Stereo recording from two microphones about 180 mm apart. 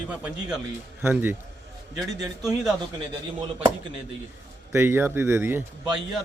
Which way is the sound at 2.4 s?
Centre (ahead or behind).